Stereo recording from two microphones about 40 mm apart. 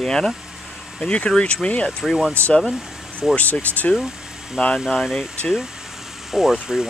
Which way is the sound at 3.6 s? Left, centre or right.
Left.